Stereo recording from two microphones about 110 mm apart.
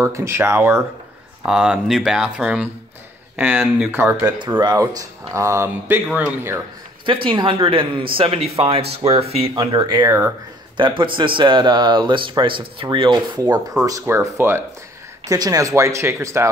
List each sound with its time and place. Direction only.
0.0 s speech: 25° right (ahead or behind)
1.4 s speech: 5° right (ahead or behind); by 4.3 s 20° right (ahead or behind)
4.3 s speech: 40° right (ahead or behind); by 6.6 s 20° right (ahead or behind)
7.1 s speech: 50° right (ahead or behind)
9.6 s speech: 40° right (ahead or behind)
10.0 s speech: 25° right (ahead or behind)
10.8 s speech: 50° right (ahead or behind)
13.4 s speech: 35° right (ahead or behind)